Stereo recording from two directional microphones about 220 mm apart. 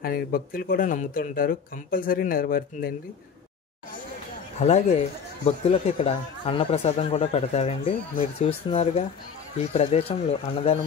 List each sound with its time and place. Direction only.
0.0 s speech: 40° left (ahead or behind)
4.6 s speech: 30° left (ahead or behind)